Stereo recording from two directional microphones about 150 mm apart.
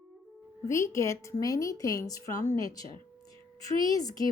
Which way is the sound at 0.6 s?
20° left (ahead or behind).